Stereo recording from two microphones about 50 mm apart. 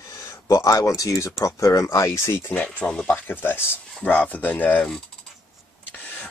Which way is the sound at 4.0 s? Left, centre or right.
Left.